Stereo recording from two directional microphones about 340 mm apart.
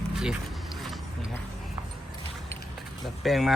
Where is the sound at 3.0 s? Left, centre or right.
Centre.